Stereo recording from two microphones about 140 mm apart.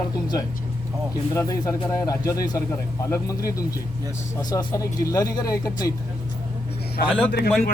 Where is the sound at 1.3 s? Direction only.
25° left (ahead or behind).